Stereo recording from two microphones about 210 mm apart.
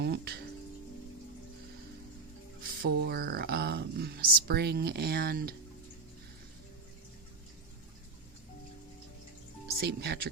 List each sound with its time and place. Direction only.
0.0 s music: 50° right (ahead or behind)
2.6 s speech: 45° right (ahead or behind)
9.8 s speech: 50° right (ahead or behind)